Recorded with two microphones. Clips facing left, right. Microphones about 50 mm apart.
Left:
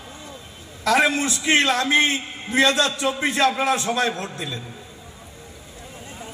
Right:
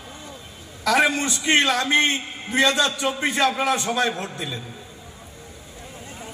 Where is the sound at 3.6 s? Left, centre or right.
Centre.